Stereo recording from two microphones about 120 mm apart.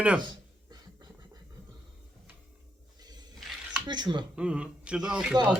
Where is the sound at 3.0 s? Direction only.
35° right (ahead or behind).